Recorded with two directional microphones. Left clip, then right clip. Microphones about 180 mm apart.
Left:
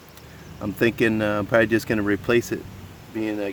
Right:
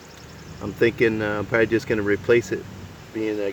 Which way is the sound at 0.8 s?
60° left (ahead or behind).